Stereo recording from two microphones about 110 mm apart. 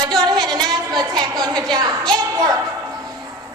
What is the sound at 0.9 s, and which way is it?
A woman's voice, 40° right (ahead or behind).